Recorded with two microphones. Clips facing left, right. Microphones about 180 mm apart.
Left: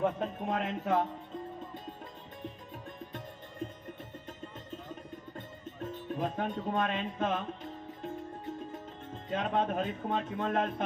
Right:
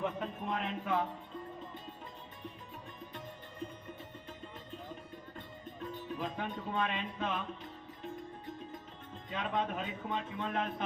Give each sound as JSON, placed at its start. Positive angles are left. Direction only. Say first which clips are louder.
{"t": 0.0, "sound": "music", "louder": "left 5 dB", "side_deg": 45}
{"t": 5.8, "sound": "music", "louder": "left 4 dB", "side_deg": 45}
{"t": 9.3, "sound": "speech", "louder": "left 5 dB", "side_deg": 45}